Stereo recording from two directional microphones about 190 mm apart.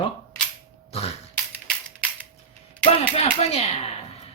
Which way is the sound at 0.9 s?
30° left (ahead or behind).